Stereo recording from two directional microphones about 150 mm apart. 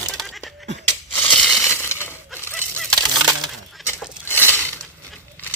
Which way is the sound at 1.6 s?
15° left (ahead or behind).